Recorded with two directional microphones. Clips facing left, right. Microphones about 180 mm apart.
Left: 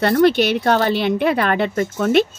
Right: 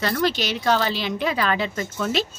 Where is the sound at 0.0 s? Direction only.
60° left (ahead or behind).